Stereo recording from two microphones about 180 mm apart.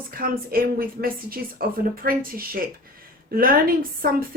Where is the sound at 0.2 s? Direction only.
55° right (ahead or behind).